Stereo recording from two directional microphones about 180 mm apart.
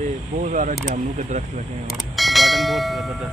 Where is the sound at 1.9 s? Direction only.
Centre (ahead or behind).